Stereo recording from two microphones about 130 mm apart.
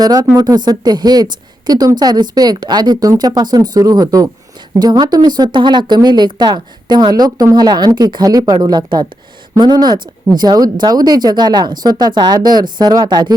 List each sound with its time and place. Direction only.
0.0 s speech: 30° right (ahead or behind)